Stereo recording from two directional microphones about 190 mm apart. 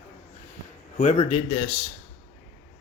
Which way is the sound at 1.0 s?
35° left (ahead or behind).